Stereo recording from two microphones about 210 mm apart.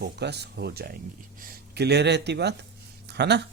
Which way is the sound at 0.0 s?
50° right (ahead or behind).